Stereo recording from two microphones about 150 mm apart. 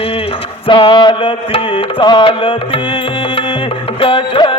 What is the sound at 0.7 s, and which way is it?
Music, 30° left (ahead or behind).